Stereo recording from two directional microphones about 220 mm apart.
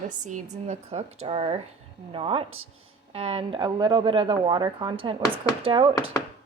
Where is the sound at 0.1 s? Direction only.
35° right (ahead or behind).